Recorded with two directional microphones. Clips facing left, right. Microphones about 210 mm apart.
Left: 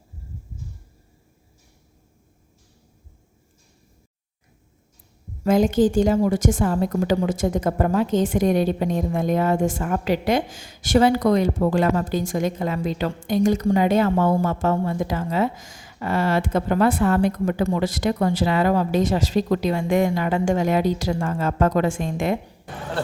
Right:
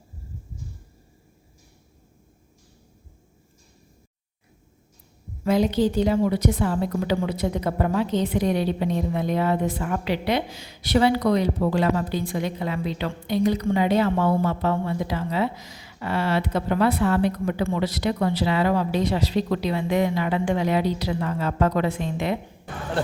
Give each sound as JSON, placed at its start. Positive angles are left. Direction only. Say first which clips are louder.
{"t": 5.4, "sound": "a woman's voice", "louder": "left 3 dB", "side_deg": 45}